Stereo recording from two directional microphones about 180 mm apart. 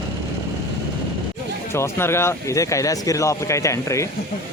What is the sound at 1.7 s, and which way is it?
Speech, 15° left (ahead or behind).